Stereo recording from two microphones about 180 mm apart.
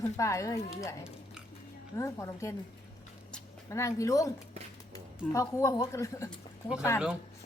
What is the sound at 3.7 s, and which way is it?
A woman's voice, 15° left (ahead or behind).